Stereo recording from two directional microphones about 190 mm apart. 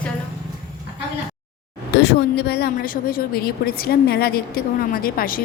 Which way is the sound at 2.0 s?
60° left (ahead or behind).